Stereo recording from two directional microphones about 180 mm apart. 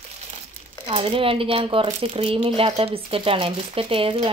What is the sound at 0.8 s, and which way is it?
Speech, 30° right (ahead or behind).